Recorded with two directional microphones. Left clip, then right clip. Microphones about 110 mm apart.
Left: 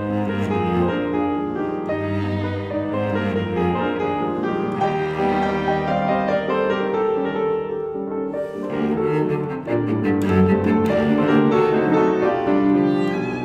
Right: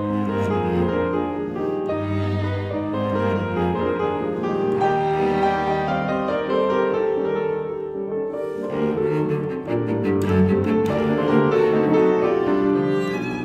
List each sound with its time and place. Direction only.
4.8 s music: 15° left (ahead or behind)
8.8 s music: 15° left (ahead or behind)
10.0 s cello: 15° left (ahead or behind)